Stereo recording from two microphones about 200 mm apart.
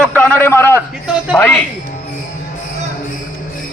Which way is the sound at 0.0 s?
5° left (ahead or behind).